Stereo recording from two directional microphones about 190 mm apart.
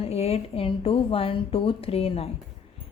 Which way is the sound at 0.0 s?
35° left (ahead or behind).